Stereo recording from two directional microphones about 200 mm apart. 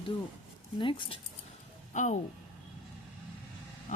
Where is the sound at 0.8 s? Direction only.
25° left (ahead or behind).